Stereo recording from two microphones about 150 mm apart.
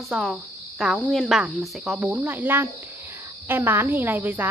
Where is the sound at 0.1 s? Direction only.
5° right (ahead or behind).